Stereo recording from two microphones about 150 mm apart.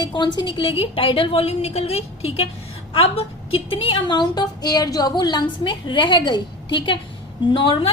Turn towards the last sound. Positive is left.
turn(degrees=35)  # may be behind; listen again after turning